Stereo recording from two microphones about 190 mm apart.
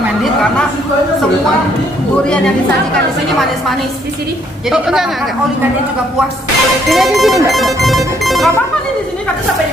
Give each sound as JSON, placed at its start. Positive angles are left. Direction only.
{"t": 0.2, "sound": "a sound", "side_deg": 5}
{"t": 4.6, "sound": "speech", "side_deg": 0}
{"t": 6.9, "sound": "speech", "side_deg": 0}